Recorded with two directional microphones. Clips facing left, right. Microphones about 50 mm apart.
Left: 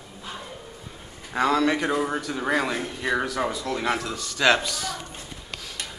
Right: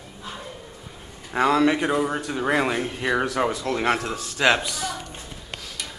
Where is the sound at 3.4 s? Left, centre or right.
Right.